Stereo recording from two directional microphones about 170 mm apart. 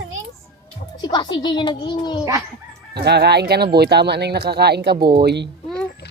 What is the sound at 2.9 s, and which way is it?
A child's voice, 75° right (ahead or behind).